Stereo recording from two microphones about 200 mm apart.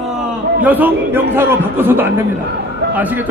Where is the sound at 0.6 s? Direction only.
10° right (ahead or behind).